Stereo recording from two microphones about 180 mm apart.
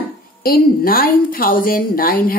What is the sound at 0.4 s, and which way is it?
A woman's voice, 55° left (ahead or behind).